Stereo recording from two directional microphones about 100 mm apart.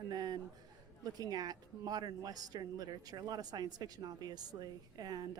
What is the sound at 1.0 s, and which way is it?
A woman's voice, 40° right (ahead or behind).